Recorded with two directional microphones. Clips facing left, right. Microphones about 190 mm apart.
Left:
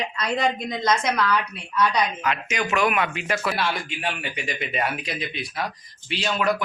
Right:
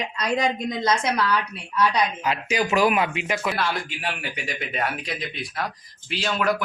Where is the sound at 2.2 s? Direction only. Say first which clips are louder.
Right 2 dB; 30° right (ahead or behind).